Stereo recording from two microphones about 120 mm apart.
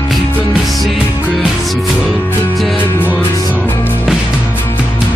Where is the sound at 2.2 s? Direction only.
20° left (ahead or behind).